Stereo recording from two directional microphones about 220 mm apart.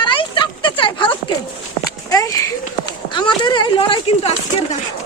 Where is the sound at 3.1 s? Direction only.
20° left (ahead or behind).